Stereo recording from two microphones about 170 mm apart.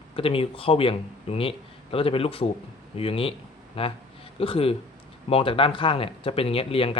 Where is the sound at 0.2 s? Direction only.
35° left (ahead or behind).